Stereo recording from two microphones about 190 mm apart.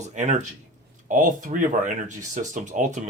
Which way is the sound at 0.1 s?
40° right (ahead or behind).